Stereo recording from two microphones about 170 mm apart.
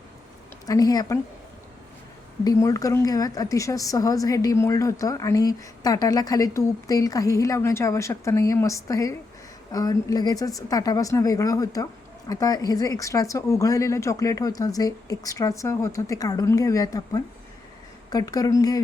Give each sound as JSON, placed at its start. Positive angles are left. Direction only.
{"t": 0.6, "sound": "a woman's voice", "side_deg": 20}
{"t": 2.4, "sound": "a woman's voice", "side_deg": 20}